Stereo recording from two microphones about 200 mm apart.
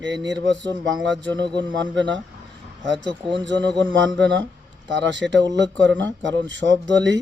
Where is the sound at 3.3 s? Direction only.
60° right (ahead or behind).